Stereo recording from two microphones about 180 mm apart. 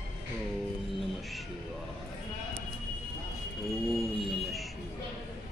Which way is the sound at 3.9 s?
Centre (ahead or behind).